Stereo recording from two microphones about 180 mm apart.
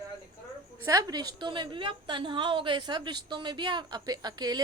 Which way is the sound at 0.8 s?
20° right (ahead or behind).